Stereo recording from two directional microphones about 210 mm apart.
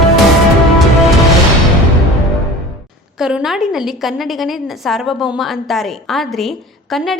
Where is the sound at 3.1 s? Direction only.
5° right (ahead or behind).